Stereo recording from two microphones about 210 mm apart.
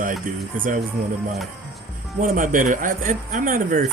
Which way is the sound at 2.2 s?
40° right (ahead or behind).